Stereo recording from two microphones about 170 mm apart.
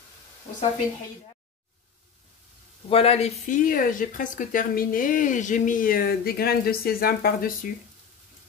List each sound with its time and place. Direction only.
2.9 s speech: 35° left (ahead or behind); by 7.5 s 60° left (ahead or behind)